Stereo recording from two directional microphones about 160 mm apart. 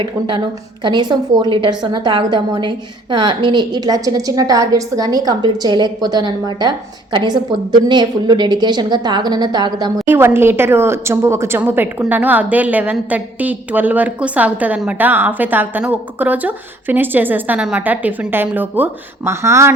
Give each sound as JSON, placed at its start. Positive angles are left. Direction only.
{"t": 0.9, "sound": "a woman's voice", "side_deg": -25}
{"t": 10.1, "sound": "a woman's voice", "side_deg": -15}